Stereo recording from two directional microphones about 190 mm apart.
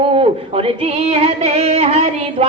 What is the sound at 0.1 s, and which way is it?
Female singing, 30° right (ahead or behind).